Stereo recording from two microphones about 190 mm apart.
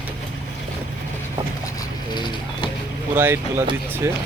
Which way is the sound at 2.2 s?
25° left (ahead or behind).